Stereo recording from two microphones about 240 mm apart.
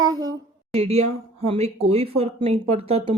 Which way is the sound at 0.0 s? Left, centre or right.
Centre.